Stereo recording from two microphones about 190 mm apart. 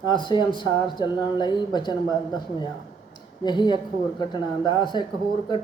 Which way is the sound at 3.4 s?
25° left (ahead or behind).